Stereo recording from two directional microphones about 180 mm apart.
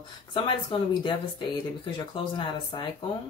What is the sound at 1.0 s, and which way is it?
Speech, 25° left (ahead or behind).